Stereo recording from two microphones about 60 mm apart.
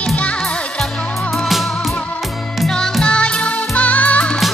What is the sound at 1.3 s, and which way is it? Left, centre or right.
Music, centre.